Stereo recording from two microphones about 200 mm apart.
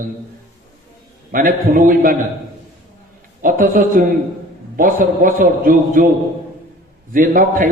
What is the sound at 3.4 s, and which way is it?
A man's voice, 45° right (ahead or behind).